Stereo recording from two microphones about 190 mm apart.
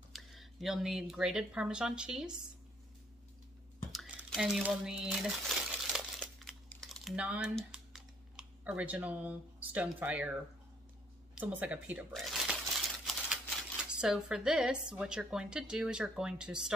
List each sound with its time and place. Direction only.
0.1 s speech: centre (ahead or behind)
3.9 s a sound: centre (ahead or behind)
11.3 s speech: 5° right (ahead or behind)